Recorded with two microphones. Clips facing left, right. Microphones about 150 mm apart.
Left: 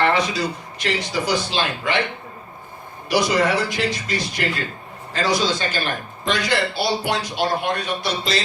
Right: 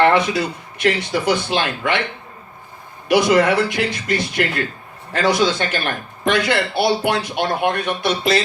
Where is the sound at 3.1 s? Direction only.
55° right (ahead or behind).